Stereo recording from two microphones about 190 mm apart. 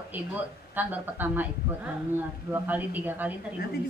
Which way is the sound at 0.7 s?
10° right (ahead or behind).